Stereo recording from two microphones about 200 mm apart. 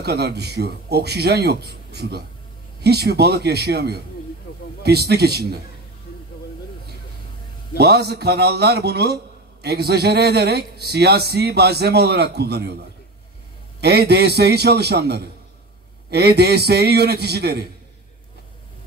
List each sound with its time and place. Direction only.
0.0 s a man's voice: 55° right (ahead or behind)
7.7 s a man's voice: 55° right (ahead or behind)